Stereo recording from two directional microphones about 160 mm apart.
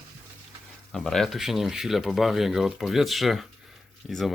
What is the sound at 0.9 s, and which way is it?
Speech, centre (ahead or behind).